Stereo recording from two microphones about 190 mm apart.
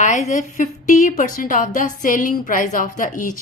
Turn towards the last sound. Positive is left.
turn(degrees=45)  # may be behind; listen again after turning